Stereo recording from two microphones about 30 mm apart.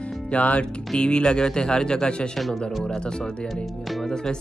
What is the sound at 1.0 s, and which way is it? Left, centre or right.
Speech, left.